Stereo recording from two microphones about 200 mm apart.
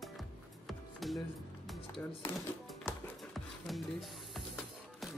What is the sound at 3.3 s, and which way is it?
Music, centre (ahead or behind).